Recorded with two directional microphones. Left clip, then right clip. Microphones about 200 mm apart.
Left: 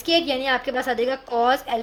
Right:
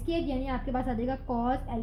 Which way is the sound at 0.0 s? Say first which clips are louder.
Left 11 dB; 40° left (ahead or behind).